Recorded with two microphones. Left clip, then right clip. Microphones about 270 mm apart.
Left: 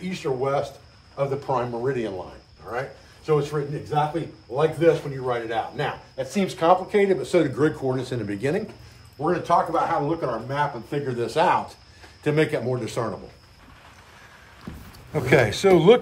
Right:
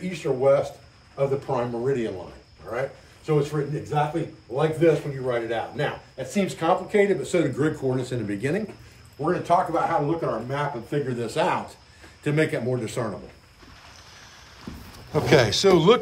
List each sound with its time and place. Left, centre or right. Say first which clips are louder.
0.1 s a man's voice: right 4 dB; centre
3.3 s a man's voice: left 1 dB; centre
15.1 s speech: right 1 dB; centre